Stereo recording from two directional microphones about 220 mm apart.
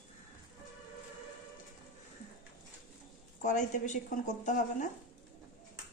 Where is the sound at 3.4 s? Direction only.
35° left (ahead or behind).